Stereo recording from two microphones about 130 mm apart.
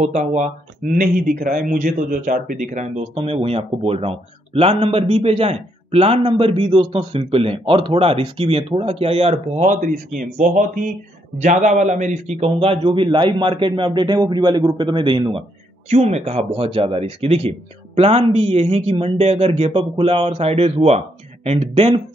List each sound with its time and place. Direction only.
0.0 s speech: 65° right (ahead or behind)
3.2 s a man's voice: 50° right (ahead or behind); by 10.9 s 85° right
11.3 s a man's voice: 70° right (ahead or behind); by 15.4 s 35° right (ahead or behind)
15.9 s a man's voice: 55° right (ahead or behind)